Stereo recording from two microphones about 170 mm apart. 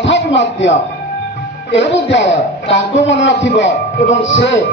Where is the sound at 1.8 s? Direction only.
90° left.